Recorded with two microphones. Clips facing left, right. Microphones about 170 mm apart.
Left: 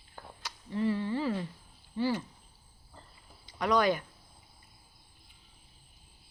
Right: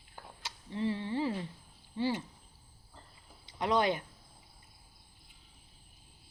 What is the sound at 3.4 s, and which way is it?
Speech, 25° right (ahead or behind).